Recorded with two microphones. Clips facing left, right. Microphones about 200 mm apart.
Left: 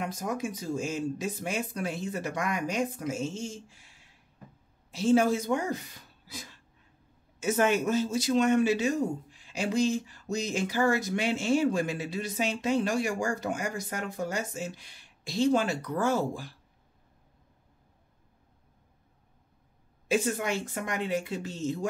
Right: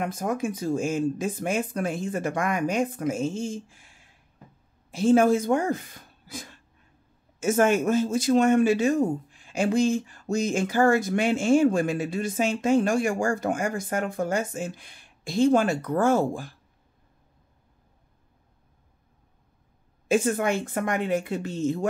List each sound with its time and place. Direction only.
0.0 s speech: 55° right (ahead or behind)
20.1 s speech: 50° right (ahead or behind)